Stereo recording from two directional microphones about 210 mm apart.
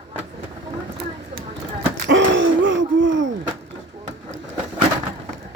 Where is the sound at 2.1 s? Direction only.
60° right (ahead or behind).